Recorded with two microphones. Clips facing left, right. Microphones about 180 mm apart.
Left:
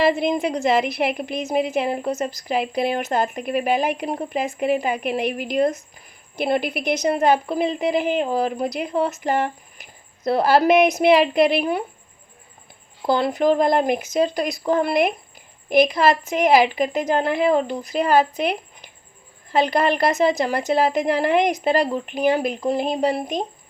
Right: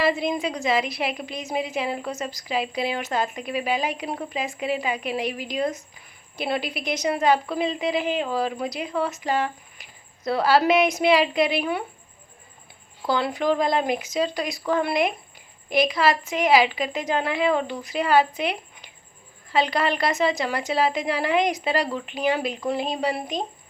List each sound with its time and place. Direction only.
0.0 s a woman's voice: 55° left (ahead or behind)
13.1 s a woman's voice: 45° left (ahead or behind)
19.5 s a woman's voice: 50° left (ahead or behind)